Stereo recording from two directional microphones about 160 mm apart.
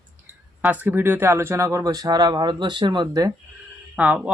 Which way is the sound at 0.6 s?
10° right (ahead or behind).